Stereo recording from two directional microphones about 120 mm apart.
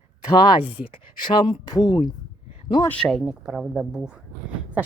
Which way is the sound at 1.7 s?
35° left (ahead or behind).